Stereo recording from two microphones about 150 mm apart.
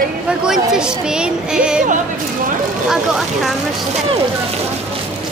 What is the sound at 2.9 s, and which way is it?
Speech, centre (ahead or behind).